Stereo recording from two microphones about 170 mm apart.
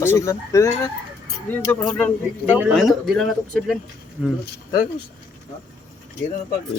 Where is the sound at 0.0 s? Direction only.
15° left (ahead or behind).